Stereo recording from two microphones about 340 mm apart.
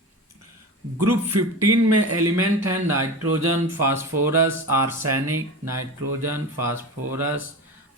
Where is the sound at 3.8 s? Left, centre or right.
Centre.